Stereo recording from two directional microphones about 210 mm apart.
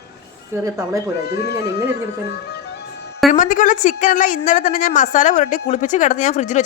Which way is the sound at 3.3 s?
40° left (ahead or behind).